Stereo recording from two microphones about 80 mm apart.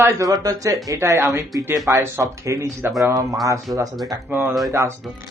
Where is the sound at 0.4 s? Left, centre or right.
Right.